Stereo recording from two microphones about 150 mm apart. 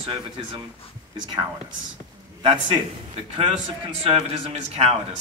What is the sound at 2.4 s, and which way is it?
Speech, 35° right (ahead or behind).